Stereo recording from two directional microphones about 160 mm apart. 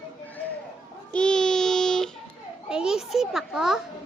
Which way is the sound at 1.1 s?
5° left (ahead or behind).